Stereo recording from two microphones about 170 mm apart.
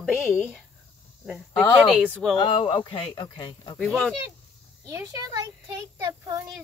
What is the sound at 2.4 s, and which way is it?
Speech, 30° left (ahead or behind).